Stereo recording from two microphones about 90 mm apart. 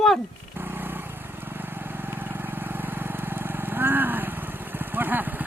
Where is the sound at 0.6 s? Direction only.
25° right (ahead or behind).